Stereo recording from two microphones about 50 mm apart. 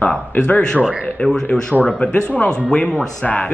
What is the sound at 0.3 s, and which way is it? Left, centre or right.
Speech, left.